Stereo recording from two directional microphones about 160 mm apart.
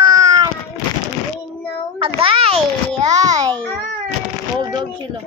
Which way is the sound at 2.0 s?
35° right (ahead or behind).